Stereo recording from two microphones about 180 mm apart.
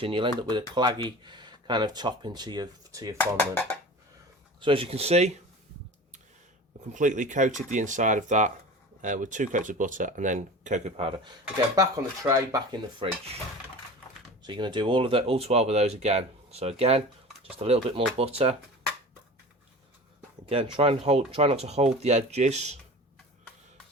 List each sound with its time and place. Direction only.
0.0 s speech: 30° right (ahead or behind)
3.2 s speech: 10° left (ahead or behind)
4.6 s speech: 30° right (ahead or behind)
6.9 s speech: 45° right (ahead or behind)
11.8 s speech: 15° right (ahead or behind)
14.4 s speech: 25° right (ahead or behind)
20.5 s speech: 30° right (ahead or behind)